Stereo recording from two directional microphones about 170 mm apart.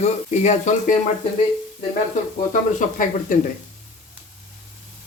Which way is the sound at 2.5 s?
50° left (ahead or behind).